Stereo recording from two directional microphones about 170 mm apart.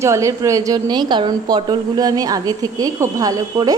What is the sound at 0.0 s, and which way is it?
A woman's voice, 15° right (ahead or behind).